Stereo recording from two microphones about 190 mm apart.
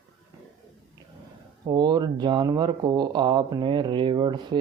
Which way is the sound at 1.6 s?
20° right (ahead or behind).